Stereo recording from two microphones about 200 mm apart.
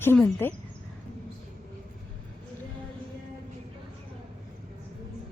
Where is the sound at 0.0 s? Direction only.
10° left (ahead or behind).